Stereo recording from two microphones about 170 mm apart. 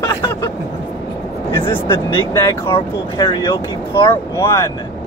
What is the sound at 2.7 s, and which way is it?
Speech, 30° left (ahead or behind).